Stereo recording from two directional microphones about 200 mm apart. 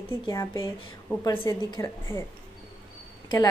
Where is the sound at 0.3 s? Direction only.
15° left (ahead or behind).